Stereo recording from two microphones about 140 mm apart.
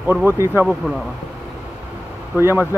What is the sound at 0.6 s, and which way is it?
Speech, 5° right (ahead or behind).